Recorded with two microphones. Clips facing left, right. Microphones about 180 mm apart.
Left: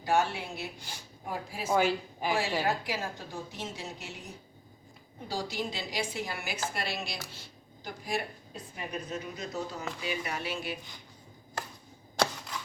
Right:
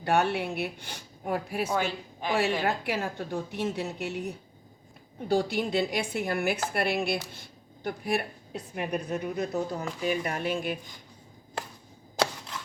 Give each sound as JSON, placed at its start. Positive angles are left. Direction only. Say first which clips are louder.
{"t": 0.0, "sound": "a woman's voice", "louder": "right 3 dB", "side_deg": -60}
{"t": 1.7, "sound": "speech", "louder": "left 3 dB", "side_deg": 10}
{"t": 2.6, "sound": "a woman's voice", "louder": "right 3 dB", "side_deg": -60}